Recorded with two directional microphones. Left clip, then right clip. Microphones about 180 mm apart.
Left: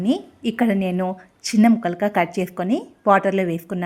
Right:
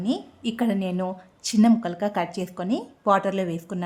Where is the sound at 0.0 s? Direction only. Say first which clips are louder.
Left 5 dB; 25° left (ahead or behind).